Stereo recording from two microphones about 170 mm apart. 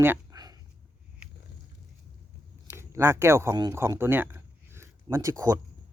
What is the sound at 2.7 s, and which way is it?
Speech, 15° right (ahead or behind).